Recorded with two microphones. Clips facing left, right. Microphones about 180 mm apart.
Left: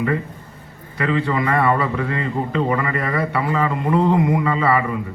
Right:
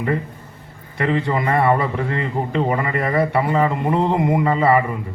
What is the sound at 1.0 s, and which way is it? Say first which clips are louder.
A man's voice: even; 30° right (ahead or behind).